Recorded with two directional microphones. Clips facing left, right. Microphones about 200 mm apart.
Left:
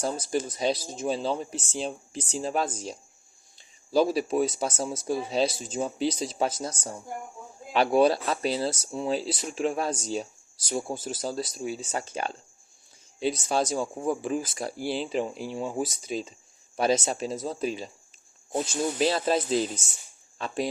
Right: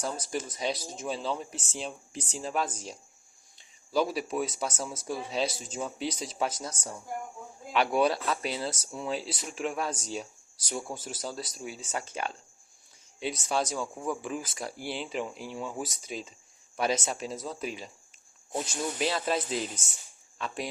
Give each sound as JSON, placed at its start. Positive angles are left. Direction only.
{"t": 0.0, "sound": "speech", "side_deg": 35}
{"t": 3.9, "sound": "speech", "side_deg": 35}
{"t": 18.9, "sound": "speech", "side_deg": 35}